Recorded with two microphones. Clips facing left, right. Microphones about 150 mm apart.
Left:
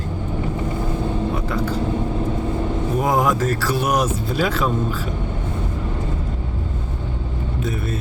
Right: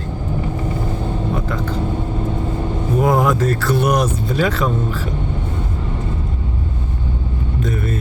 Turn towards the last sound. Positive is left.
turn(degrees=5)  # may be behind; listen again after turning